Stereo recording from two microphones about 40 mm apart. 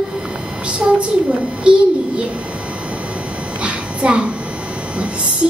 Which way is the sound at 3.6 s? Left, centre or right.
Right.